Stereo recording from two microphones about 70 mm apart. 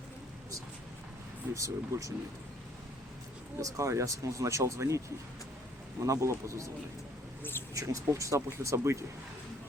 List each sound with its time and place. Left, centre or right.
1.5 s speech: right
3.6 s speech: right
7.7 s speech: right